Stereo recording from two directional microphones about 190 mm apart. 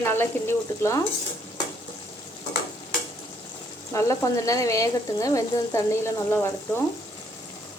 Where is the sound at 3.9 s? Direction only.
15° left (ahead or behind).